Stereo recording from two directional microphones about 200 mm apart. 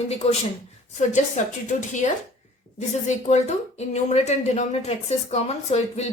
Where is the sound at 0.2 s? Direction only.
30° left (ahead or behind).